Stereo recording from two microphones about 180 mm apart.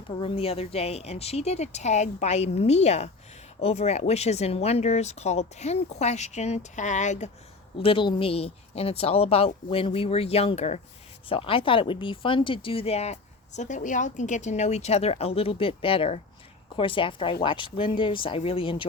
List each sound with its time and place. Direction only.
0.2 s speech: 30° left (ahead or behind)
7.8 s speech: 30° left (ahead or behind)